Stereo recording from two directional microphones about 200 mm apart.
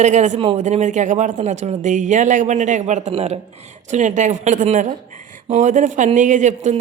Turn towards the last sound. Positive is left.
turn(degrees=-40)  # may be behind; listen again after turning